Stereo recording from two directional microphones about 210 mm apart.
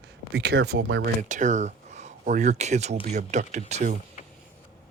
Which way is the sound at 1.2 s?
35° right (ahead or behind).